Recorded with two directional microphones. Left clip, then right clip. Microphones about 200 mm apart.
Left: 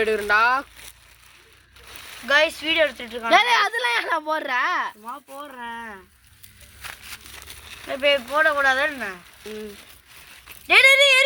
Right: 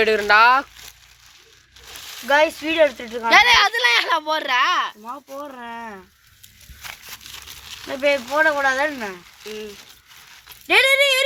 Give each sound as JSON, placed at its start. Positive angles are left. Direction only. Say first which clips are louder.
{"t": 0.0, "sound": "speech", "louder": "right 5 dB", "side_deg": 0}
{"t": 2.2, "sound": "speech", "louder": "right 2 dB", "side_deg": -35}
{"t": 3.2, "sound": "speech", "louder": "right 4 dB", "side_deg": 45}
{"t": 5.5, "sound": "speech", "louder": "right 1 dB", "side_deg": -25}
{"t": 7.3, "sound": "a sound", "louder": "right 3 dB", "side_deg": 40}
{"t": 7.9, "sound": "speech", "louder": "right 1 dB", "side_deg": -35}
{"t": 9.4, "sound": "speech", "louder": "right 4 dB", "side_deg": 40}
{"t": 10.7, "sound": "speech", "louder": "left 1 dB", "side_deg": -45}